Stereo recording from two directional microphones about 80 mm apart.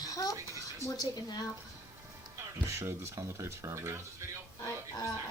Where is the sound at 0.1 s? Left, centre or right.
Left.